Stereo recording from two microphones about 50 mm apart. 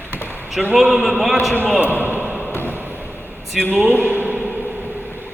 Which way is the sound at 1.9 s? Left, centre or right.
Right.